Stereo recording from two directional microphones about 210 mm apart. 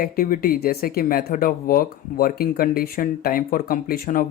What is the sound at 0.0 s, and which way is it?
Speech, 45° left (ahead or behind).